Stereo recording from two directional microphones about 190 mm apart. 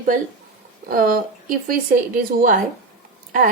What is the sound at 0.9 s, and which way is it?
Speech, 50° right (ahead or behind).